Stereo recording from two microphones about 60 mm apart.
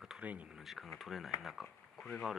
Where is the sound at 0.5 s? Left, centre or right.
Centre.